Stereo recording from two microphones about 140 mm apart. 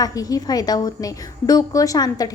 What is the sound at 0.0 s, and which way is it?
A woman's voice, 25° left (ahead or behind).